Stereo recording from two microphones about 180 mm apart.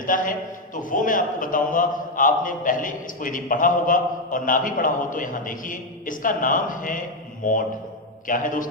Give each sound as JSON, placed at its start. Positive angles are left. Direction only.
{"t": 0.0, "sound": "a man's voice", "side_deg": 50}